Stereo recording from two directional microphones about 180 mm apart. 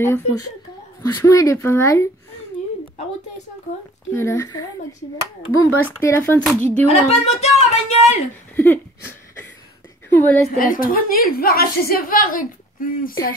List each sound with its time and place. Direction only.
0.0 s speech: 15° left (ahead or behind)
4.1 s speech: 15° left (ahead or behind)
5.9 s speech: 15° left (ahead or behind)
6.4 s speech: centre (ahead or behind)
6.9 s a woman's voice: 35° left (ahead or behind)
8.5 s a sound: 10° left (ahead or behind)
10.0 s a woman's voice: 10° left (ahead or behind)
10.6 s a woman's voice: 50° left (ahead or behind)